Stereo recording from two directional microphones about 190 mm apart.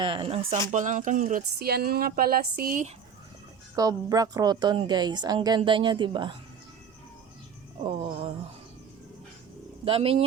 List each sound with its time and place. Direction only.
0.0 s a woman's voice: 25° right (ahead or behind)
0.7 s speech: 40° right (ahead or behind)
1.5 s speech: 55° right (ahead or behind)
3.8 s a woman's voice: 20° right (ahead or behind)
7.9 s a woman's voice: 30° right (ahead or behind)
9.8 s speech: 30° right (ahead or behind)